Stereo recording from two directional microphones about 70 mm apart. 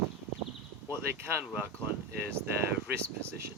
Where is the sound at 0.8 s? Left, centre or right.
Right.